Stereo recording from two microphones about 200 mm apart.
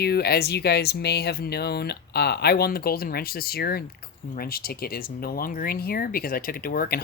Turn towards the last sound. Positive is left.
turn(degrees=50)  # may be behind; listen again after turning